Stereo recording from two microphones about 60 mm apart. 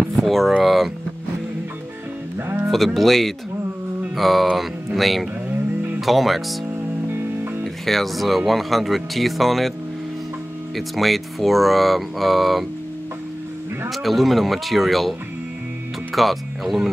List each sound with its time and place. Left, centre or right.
0.2 s a sound: centre
2.7 s speech: centre
5.5 s music: right
5.9 s speech: centre
7.1 s music: right
7.6 s speech: centre
11.0 s speech: centre
13.8 s speech: centre
16.2 s speech: centre